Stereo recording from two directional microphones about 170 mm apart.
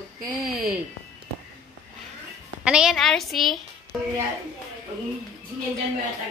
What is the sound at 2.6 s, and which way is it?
Speech, 5° right (ahead or behind).